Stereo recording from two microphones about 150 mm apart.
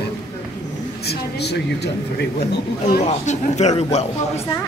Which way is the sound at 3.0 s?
50° left (ahead or behind).